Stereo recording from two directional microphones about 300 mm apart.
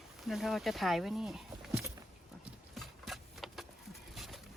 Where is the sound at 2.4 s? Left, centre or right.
Centre.